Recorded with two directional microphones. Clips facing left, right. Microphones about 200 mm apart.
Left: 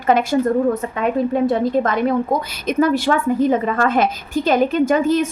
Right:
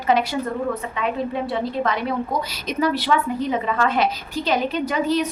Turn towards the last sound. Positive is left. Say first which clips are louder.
# left 6 dB
turn(degrees=50)  # may be behind; listen again after turning